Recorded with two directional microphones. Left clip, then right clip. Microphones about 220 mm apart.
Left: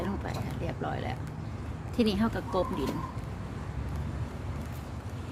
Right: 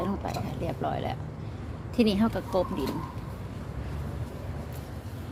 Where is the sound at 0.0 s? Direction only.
15° right (ahead or behind).